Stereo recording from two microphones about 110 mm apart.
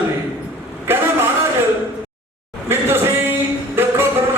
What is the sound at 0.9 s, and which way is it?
Vehicle, 20° right (ahead or behind).